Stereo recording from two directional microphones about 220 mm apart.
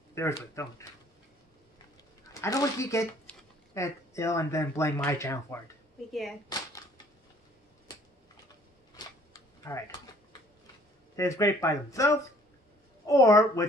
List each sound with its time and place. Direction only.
0.1 s speech: 15° left (ahead or behind)
2.4 s speech: 15° left (ahead or behind)
6.5 s typewriter: 20° left (ahead or behind)
8.9 s camera: 15° left (ahead or behind)
11.1 s speech: 15° left (ahead or behind)